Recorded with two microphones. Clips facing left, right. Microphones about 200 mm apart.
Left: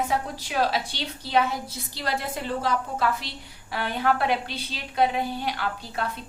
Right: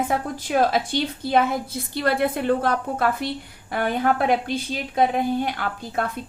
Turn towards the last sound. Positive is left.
turn(degrees=-50)  # may be behind; listen again after turning